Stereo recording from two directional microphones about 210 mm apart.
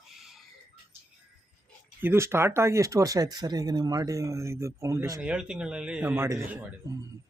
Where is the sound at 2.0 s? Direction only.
10° right (ahead or behind).